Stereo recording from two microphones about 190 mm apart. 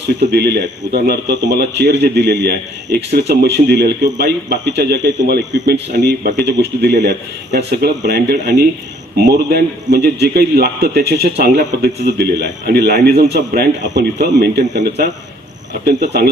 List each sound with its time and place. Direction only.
0.3 s a man's voice: 55° right (ahead or behind)